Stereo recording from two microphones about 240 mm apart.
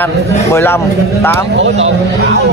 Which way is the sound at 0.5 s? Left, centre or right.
Centre.